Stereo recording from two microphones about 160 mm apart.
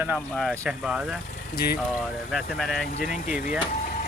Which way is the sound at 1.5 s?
75° left (ahead or behind).